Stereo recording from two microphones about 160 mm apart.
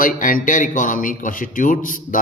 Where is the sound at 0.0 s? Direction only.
60° left (ahead or behind).